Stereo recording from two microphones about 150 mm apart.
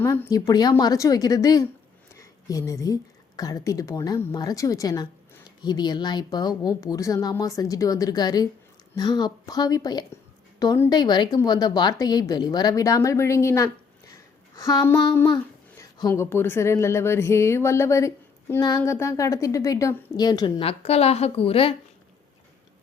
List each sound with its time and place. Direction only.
0.0 s a woman's voice: 20° left (ahead or behind)
14.1 s a sound: 20° left (ahead or behind)
14.9 s a woman's voice: 25° left (ahead or behind)
20.6 s a woman's voice: 40° left (ahead or behind)